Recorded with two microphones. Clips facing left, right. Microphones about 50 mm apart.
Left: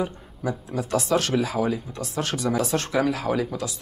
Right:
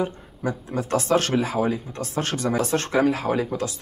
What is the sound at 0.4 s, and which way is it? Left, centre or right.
Speech, right.